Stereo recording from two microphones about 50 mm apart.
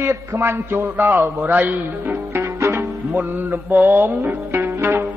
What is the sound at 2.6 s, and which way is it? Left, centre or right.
Music, right.